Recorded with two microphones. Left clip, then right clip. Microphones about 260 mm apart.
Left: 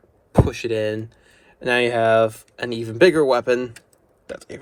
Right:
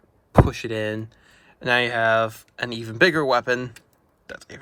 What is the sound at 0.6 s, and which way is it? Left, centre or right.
Speech, right.